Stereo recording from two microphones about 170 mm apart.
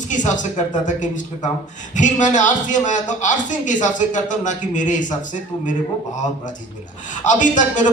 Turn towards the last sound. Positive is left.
turn(degrees=50)  # may be behind; listen again after turning